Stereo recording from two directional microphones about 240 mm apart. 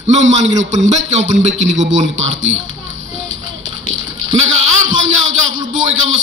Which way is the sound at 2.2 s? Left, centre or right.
Right.